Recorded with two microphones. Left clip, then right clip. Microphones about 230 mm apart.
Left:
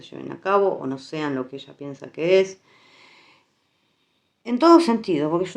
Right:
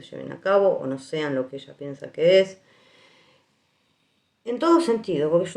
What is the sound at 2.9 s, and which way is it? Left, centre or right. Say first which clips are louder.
Snort: left 6 dB; left.